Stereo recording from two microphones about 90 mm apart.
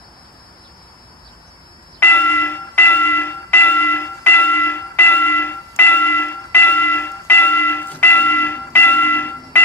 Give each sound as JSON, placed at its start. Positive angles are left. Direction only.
{"t": 2.0, "sound": "bell", "side_deg": 20}